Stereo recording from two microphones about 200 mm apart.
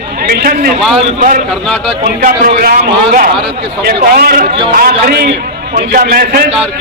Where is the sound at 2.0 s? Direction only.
50° right (ahead or behind).